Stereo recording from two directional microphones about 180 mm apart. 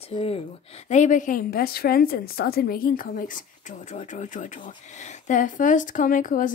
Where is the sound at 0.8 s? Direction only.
40° left (ahead or behind).